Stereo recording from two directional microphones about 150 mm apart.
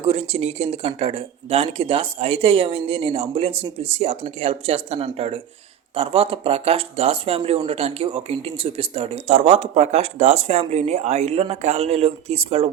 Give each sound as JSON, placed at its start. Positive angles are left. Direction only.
{"t": 0.0, "sound": "speech", "side_deg": -45}